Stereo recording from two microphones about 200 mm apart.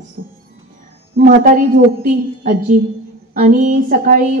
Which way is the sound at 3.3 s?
40° right (ahead or behind).